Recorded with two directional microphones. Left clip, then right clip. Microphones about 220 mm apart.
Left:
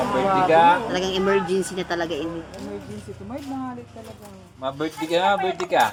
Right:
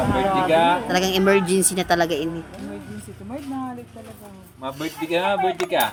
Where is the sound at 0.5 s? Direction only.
25° left (ahead or behind).